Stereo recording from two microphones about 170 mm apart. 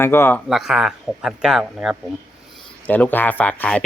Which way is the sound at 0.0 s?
15° left (ahead or behind).